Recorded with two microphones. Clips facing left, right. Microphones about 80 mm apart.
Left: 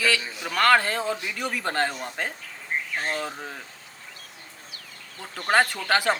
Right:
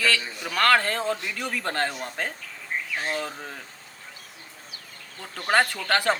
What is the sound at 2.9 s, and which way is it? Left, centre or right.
Speech, left.